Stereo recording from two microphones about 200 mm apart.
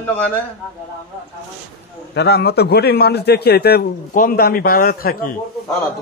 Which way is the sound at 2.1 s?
55° left (ahead or behind).